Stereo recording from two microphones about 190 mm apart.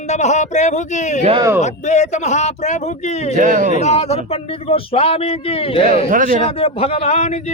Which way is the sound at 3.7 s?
35° left (ahead or behind).